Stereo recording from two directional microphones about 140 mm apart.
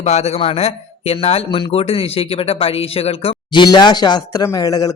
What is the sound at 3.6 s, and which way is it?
Speech, 30° left (ahead or behind).